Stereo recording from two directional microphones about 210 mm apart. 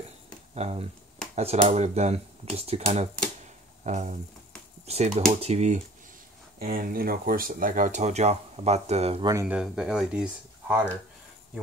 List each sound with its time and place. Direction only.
0.6 s speech: 30° right (ahead or behind)
6.6 s speech: 45° right (ahead or behind)
9.3 s speech: 10° right (ahead or behind)